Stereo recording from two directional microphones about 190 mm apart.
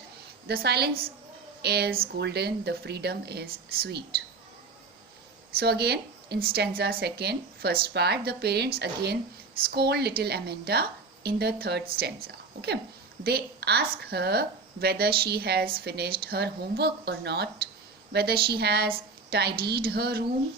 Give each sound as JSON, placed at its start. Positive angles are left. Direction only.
{"t": 0.4, "sound": "a woman's voice", "side_deg": -55}
{"t": 5.5, "sound": "a woman's voice", "side_deg": -60}